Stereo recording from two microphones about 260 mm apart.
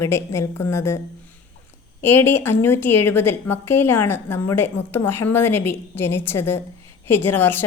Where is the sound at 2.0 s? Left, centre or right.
Centre.